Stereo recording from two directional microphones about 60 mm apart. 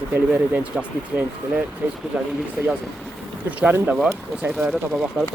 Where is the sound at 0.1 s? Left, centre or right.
Right.